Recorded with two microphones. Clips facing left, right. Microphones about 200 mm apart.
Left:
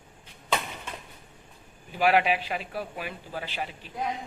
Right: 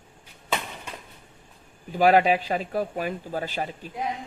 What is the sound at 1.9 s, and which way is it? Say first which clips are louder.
A man's voice: right 5 dB; 40° right (ahead or behind).